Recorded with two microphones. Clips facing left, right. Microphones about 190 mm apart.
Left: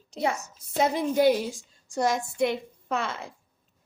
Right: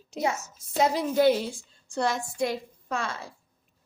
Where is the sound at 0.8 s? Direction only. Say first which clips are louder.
Even; 25° left (ahead or behind).